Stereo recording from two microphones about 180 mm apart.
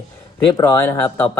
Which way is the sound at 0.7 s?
10° left (ahead or behind).